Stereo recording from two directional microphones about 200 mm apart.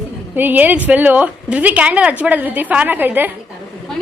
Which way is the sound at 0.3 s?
10° right (ahead or behind).